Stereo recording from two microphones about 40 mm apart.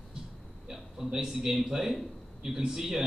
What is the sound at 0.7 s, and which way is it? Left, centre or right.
A man's voice, centre.